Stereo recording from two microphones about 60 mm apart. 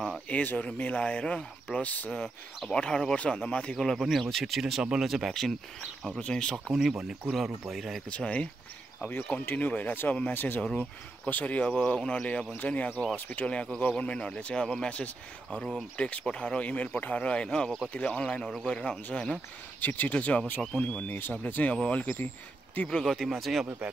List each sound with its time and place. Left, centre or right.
0.3 s speech: left
2.1 s speech: centre
3.8 s speech: centre
6.0 s speech: centre
6.5 s speech: centre
8.1 s speech: left
9.0 s speech: left
18.2 s speech: centre
19.8 s speech: left
22.8 s speech: centre